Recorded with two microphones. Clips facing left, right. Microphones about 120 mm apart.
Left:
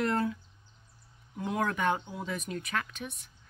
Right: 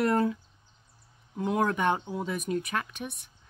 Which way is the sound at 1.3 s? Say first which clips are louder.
Right 4 dB; 25° right (ahead or behind).